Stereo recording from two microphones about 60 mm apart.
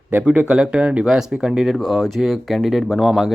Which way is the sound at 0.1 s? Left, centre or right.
Right.